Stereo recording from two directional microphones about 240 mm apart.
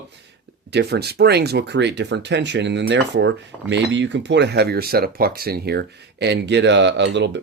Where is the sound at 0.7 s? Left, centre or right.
Right.